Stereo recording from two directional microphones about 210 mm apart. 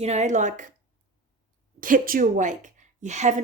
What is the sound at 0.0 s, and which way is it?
Speech, 35° right (ahead or behind).